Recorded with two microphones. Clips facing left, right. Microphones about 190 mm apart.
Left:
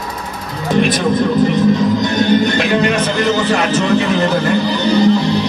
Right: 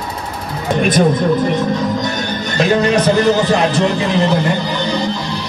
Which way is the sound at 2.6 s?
40° right (ahead or behind).